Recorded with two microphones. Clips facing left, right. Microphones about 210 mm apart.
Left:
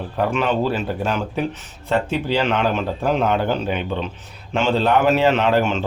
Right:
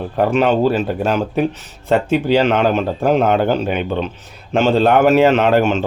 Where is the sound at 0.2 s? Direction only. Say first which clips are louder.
Right 6 dB; 45° right (ahead or behind).